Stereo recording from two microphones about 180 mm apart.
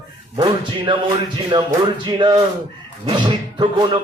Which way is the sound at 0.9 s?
25° right (ahead or behind).